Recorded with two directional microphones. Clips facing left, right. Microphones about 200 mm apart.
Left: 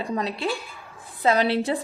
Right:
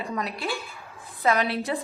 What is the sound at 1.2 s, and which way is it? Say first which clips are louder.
Speech: left 3 dB; 30° left (ahead or behind).